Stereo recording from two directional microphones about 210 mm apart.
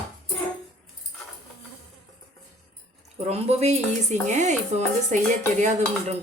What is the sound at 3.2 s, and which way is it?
A woman's voice, 30° right (ahead or behind).